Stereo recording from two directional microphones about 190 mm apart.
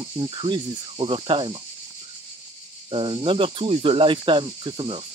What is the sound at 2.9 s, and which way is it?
Cricket, 30° right (ahead or behind).